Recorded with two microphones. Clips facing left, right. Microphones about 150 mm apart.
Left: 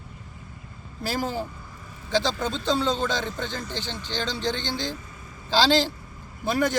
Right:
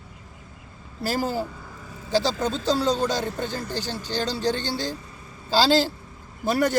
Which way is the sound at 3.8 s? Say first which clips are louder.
Right 3 dB; 40° right (ahead or behind).